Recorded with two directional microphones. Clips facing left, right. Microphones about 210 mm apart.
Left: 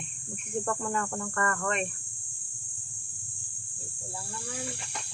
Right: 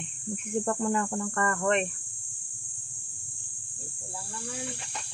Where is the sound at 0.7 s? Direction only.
25° right (ahead or behind).